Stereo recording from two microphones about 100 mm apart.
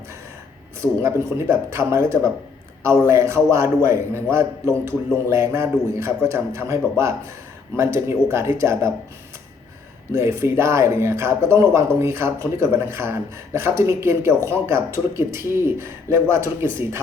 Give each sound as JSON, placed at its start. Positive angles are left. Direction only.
{"t": 0.8, "sound": "speech", "side_deg": -25}
{"t": 10.2, "sound": "speech", "side_deg": -25}